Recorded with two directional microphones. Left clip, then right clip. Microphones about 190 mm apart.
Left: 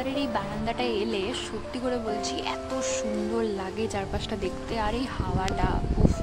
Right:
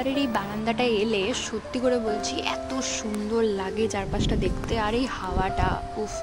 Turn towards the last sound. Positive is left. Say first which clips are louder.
# right 3 dB
turn(degrees=-15)  # may be behind; listen again after turning